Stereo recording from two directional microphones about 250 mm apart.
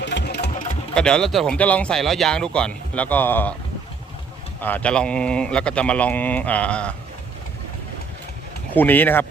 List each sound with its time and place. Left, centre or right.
0.0 s sewing machine: left
0.9 s speech: centre
4.6 s speech: centre
8.7 s speech: centre